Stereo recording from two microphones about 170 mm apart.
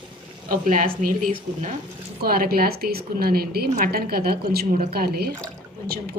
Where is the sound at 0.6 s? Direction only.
50° right (ahead or behind).